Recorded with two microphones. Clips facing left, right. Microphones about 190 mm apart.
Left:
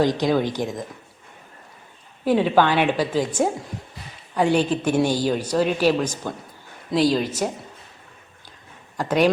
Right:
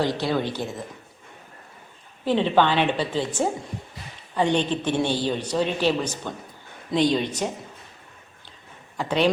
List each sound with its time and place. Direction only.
0.0 s a woman's voice: 15° left (ahead or behind)
2.2 s a woman's voice: 10° left (ahead or behind)
9.0 s a woman's voice: 10° left (ahead or behind)